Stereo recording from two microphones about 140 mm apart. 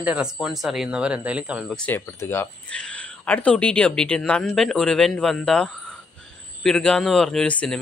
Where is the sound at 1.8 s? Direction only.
15° left (ahead or behind).